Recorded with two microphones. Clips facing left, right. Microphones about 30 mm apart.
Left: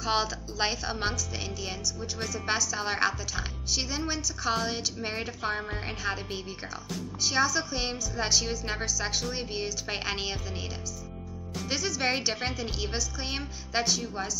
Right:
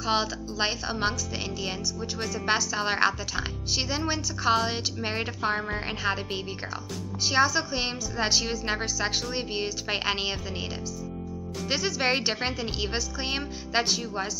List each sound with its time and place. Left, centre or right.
0.0 s a woman's voice: centre
11.7 s speech: right